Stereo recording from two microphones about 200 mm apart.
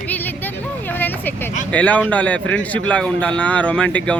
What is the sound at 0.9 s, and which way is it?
Vehicle, 10° left (ahead or behind).